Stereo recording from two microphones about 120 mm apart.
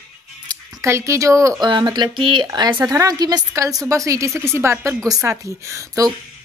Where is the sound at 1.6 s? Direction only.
40° right (ahead or behind).